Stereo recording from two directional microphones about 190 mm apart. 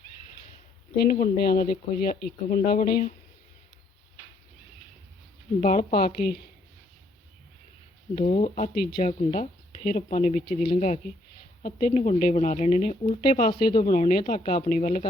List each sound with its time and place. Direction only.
0.9 s speech: 45° left (ahead or behind)
5.5 s speech: 40° left (ahead or behind)
8.2 s speech: 35° left (ahead or behind)